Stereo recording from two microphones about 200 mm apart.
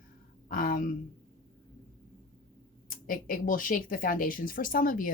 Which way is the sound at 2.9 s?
45° left (ahead or behind).